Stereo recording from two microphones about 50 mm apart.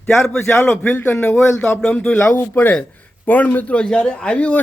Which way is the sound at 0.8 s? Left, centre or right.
Left.